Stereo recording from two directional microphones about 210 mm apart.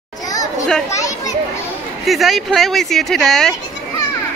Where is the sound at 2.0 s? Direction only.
Centre (ahead or behind).